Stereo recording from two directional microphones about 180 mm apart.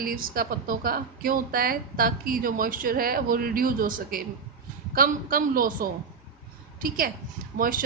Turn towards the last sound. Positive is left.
turn(degrees=-50)  # may be behind; listen again after turning